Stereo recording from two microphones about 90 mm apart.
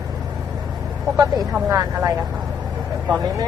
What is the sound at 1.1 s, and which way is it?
Speech, 40° right (ahead or behind).